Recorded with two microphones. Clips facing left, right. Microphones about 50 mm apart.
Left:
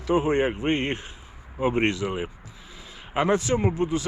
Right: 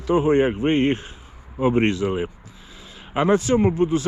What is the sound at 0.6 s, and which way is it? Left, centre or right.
Speech, right.